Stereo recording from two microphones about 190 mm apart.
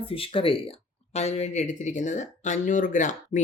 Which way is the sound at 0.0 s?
30° left (ahead or behind).